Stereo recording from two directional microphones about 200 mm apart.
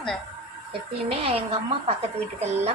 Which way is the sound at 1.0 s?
30° right (ahead or behind).